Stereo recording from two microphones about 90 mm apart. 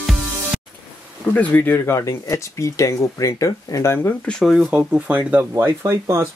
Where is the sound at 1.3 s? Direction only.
20° left (ahead or behind).